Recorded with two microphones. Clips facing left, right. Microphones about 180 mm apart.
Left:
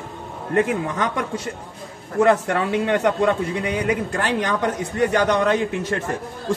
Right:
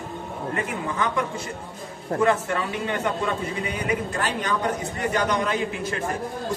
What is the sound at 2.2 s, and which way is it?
A man's voice, 70° left (ahead or behind).